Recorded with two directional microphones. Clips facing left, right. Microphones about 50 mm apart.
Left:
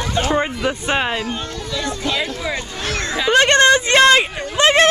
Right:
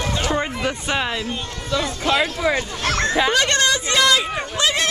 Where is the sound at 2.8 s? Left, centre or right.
Right.